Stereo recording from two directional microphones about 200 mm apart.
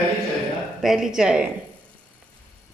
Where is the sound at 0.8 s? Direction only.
Centre (ahead or behind).